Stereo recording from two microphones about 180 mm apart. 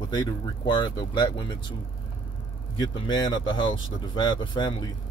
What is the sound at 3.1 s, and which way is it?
Speech, 25° left (ahead or behind).